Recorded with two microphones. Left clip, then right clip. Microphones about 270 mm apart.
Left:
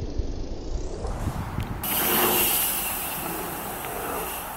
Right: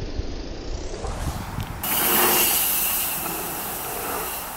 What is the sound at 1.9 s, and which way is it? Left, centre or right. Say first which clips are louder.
Pulleys: right 3 dB; centre.